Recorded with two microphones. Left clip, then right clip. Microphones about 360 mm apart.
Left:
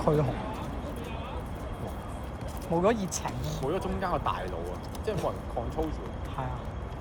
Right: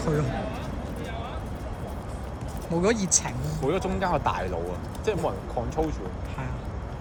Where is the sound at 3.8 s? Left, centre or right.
Centre.